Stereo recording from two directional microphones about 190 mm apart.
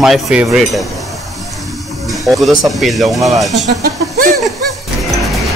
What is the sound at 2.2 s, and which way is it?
Speech, centre (ahead or behind).